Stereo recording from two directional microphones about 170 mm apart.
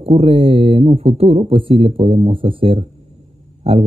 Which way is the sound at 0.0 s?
35° right (ahead or behind).